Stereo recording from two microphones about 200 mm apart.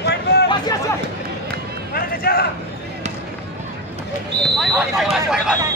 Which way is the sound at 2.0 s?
50° left (ahead or behind).